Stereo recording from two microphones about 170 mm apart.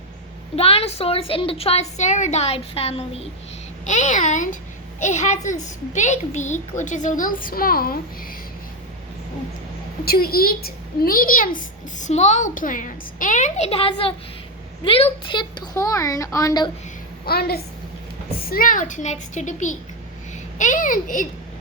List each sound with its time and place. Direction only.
0.5 s a woman's voice: 35° left (ahead or behind)
3.8 s a child's voice: 45° left (ahead or behind)
10.1 s a child's voice: 65° left (ahead or behind); by 16.6 s 20° left (ahead or behind)
17.2 s a woman's voice: 65° left (ahead or behind); by 21.2 s 50° left (ahead or behind)